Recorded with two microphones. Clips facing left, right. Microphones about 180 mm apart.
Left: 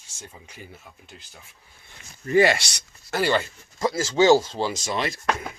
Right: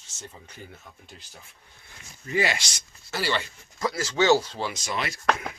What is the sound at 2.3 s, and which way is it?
Speech, 55° left (ahead or behind).